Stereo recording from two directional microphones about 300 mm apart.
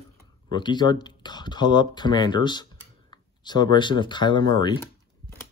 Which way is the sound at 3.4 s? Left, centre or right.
Centre.